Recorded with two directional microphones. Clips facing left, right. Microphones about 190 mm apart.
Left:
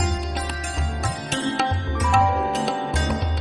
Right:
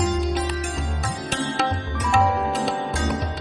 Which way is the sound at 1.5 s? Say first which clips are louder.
Even; centre (ahead or behind).